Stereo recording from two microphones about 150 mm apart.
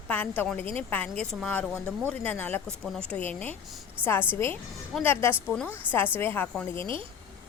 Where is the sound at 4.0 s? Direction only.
10° right (ahead or behind).